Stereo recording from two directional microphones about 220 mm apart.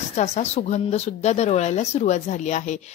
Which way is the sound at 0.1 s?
30° left (ahead or behind).